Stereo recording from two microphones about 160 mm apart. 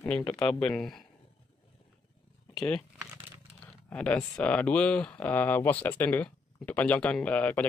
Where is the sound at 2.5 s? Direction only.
Centre (ahead or behind).